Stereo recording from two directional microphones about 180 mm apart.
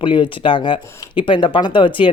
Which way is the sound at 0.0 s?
25° left (ahead or behind).